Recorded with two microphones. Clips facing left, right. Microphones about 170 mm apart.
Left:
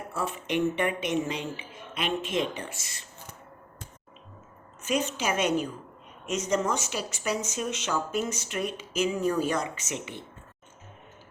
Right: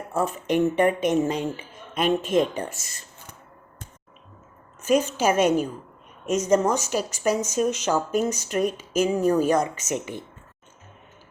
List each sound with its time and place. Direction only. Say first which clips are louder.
0.1 s speech: right 7 dB; 40° right (ahead or behind)
4.8 s speech: right 7 dB; 45° right (ahead or behind)